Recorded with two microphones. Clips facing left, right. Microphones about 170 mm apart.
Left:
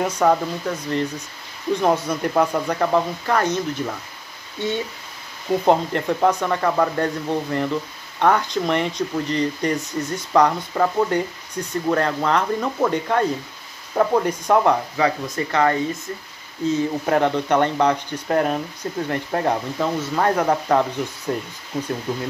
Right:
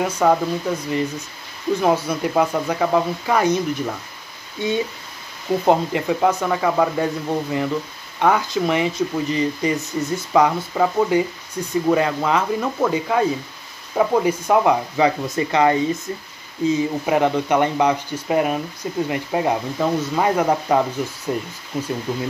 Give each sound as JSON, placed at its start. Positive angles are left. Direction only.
{"t": 0.0, "sound": "speech", "side_deg": -5}
{"t": 15.0, "sound": "speech", "side_deg": -20}